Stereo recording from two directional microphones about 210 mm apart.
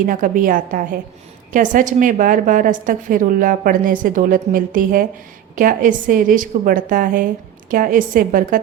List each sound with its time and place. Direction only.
0.0 s a woman's voice: 40° right (ahead or behind)